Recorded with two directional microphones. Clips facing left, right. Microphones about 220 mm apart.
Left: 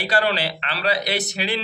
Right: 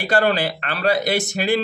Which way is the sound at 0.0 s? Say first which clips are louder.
Right 3 dB; 50° right (ahead or behind).